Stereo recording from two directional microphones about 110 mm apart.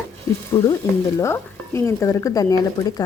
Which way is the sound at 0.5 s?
45° left (ahead or behind).